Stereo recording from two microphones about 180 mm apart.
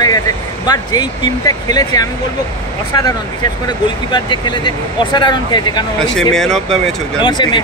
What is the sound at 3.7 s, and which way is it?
Speech, 25° left (ahead or behind).